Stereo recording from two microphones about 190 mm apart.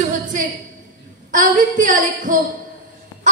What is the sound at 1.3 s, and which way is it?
A woman's voice, 45° right (ahead or behind).